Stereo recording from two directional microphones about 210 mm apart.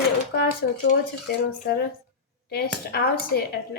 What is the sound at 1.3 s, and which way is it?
Speech, 50° left (ahead or behind).